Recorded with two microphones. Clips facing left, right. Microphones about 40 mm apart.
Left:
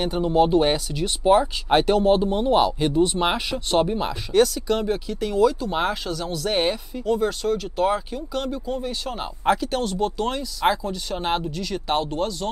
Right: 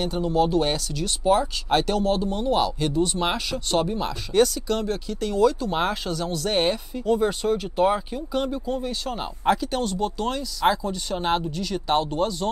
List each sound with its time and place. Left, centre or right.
0.0 s speech: centre
4.3 s speech: centre